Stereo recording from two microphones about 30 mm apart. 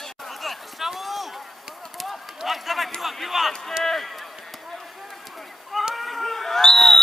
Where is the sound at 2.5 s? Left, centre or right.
Centre.